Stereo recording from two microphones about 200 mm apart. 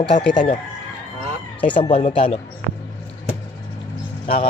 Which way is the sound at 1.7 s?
25° left (ahead or behind).